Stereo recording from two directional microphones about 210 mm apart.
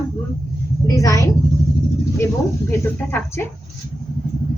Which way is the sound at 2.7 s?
10° left (ahead or behind).